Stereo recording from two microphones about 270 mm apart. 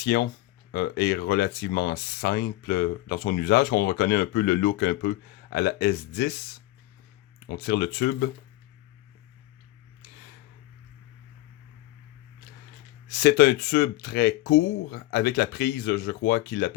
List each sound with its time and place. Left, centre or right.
0.0 s speech: left
13.1 s speech: left